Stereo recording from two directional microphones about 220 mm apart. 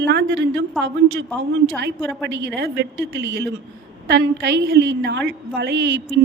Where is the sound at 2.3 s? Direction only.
55° right (ahead or behind).